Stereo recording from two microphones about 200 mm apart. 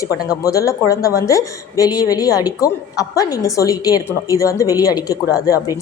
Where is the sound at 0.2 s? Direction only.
15° left (ahead or behind).